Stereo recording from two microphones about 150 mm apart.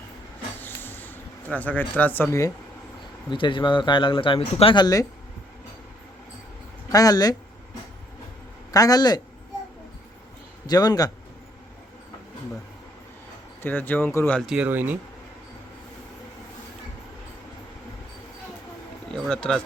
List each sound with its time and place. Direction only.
0.6 s a sound: 15° left (ahead or behind)
3.2 s speech: 35° left (ahead or behind)
6.9 s a man's voice: 25° left (ahead or behind)
8.7 s a man's voice: 25° left (ahead or behind)
10.7 s a man's voice: 25° left (ahead or behind)
13.6 s speech: 15° left (ahead or behind)
14.3 s speech: centre (ahead or behind)
19.1 s a sound: 5° left (ahead or behind)